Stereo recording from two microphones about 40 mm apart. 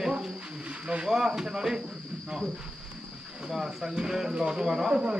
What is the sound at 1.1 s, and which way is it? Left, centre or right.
Speech, centre.